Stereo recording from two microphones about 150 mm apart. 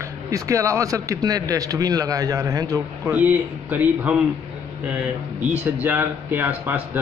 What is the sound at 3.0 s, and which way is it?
A man's voice, 10° right (ahead or behind).